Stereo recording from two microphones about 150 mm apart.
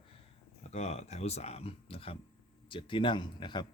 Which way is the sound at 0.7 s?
45° left (ahead or behind).